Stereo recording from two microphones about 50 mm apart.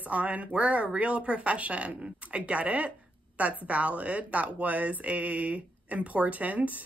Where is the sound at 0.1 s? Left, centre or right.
Right.